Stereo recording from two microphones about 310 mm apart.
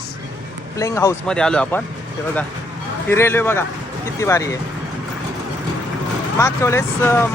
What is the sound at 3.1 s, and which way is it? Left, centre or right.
Speech, centre.